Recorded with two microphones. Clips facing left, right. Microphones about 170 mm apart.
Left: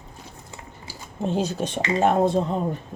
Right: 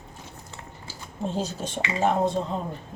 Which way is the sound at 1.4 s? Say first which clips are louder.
Left 5 dB; 70° left (ahead or behind).